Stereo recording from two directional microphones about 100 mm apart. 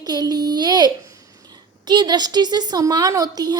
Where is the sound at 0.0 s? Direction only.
40° right (ahead or behind).